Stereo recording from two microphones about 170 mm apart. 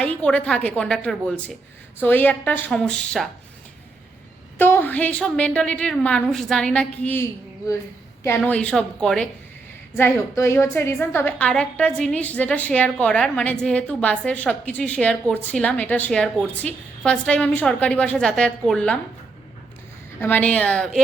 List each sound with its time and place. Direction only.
0.0 s a woman's voice: 5° left (ahead or behind)
4.5 s a woman's voice: 10° left (ahead or behind)
8.4 s a woman's voice: 5° left (ahead or behind)
9.9 s a woman's voice: 15° left (ahead or behind)
20.2 s a woman's voice: 10° left (ahead or behind)